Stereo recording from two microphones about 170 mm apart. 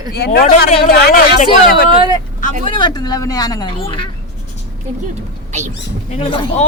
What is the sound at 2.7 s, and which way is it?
Speech, 25° left (ahead or behind).